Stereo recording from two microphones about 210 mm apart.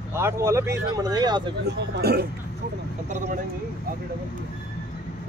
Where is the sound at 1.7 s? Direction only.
50° right (ahead or behind).